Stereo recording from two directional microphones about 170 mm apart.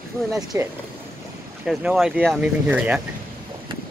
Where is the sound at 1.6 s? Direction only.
5° right (ahead or behind).